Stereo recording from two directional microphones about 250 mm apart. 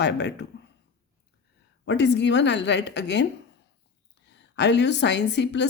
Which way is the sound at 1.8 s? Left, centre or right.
Left.